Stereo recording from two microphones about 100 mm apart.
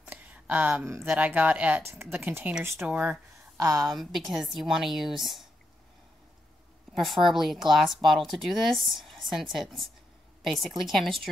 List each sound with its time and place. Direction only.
0.0 s a sound: 15° right (ahead or behind)
1.0 s speech: 15° right (ahead or behind)
3.5 s a woman's voice: 35° right (ahead or behind)
3.9 s a woman's voice: centre (ahead or behind)
6.9 s a woman's voice: centre (ahead or behind)